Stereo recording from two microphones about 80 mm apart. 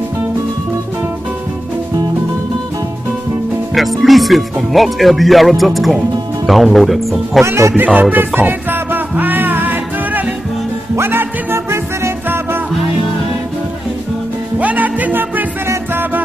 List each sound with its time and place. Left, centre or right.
4.0 s speech: centre
7.4 s speech: right
7.8 s speech: right
8.4 s music: right
14.6 s music: centre